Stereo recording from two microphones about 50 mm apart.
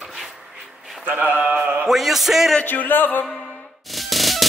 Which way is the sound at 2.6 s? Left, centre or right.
Left.